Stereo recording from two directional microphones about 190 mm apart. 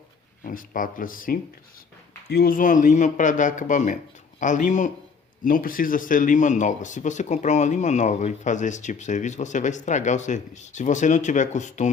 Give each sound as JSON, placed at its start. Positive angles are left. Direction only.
{"t": 0.4, "sound": "speech", "side_deg": 45}